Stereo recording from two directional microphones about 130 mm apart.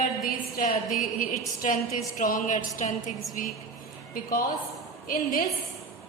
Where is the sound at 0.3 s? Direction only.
90° left.